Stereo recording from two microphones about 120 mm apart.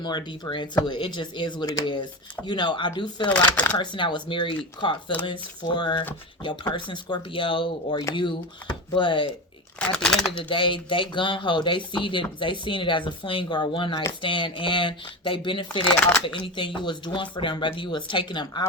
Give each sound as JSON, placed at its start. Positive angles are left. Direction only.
{"t": 0.0, "sound": "speech", "side_deg": 35}
{"t": 9.7, "sound": "speech", "side_deg": 5}
{"t": 10.3, "sound": "speech", "side_deg": 45}